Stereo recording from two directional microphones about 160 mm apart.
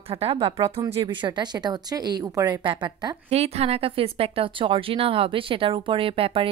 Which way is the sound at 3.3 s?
40° right (ahead or behind).